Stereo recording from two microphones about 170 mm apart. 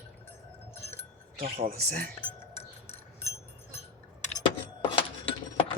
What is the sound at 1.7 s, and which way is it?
Speech, 55° right (ahead or behind).